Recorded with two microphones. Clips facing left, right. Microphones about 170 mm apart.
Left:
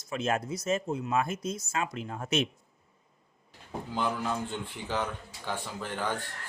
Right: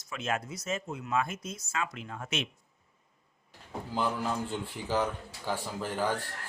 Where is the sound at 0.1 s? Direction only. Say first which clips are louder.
Left 4 dB; 35° left (ahead or behind).